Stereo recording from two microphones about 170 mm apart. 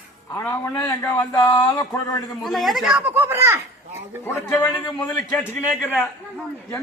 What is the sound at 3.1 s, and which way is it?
Speech, 15° right (ahead or behind).